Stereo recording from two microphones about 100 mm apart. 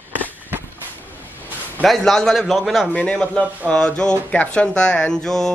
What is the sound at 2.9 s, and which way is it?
A man's voice, 10° left (ahead or behind).